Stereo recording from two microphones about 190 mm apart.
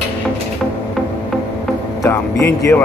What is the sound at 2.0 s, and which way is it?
Speech, 15° left (ahead or behind).